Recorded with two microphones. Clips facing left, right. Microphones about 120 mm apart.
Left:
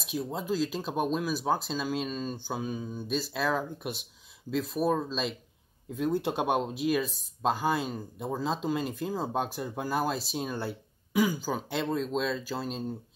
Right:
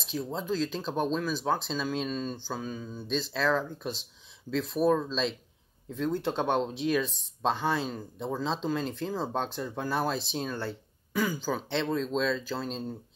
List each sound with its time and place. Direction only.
0.0 s speech: 5° left (ahead or behind)
2.4 s speech: 15° left (ahead or behind)